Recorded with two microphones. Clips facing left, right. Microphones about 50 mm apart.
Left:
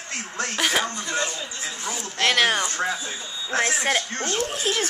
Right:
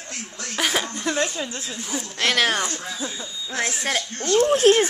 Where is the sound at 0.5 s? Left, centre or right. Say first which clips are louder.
Even; centre.